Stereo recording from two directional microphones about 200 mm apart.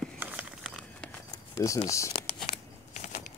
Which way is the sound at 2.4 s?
35° left (ahead or behind).